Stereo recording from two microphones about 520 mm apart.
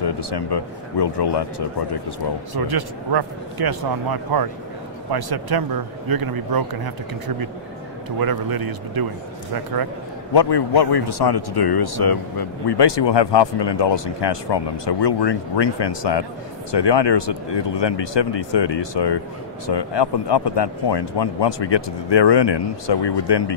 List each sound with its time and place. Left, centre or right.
0.0 s speech: left
2.5 s a man's voice: right
10.3 s speech: left